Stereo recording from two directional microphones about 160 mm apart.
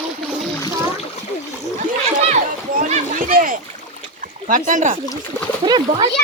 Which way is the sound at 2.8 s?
55° right (ahead or behind).